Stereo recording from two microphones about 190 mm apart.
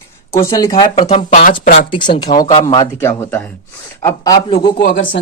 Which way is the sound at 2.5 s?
40° left (ahead or behind).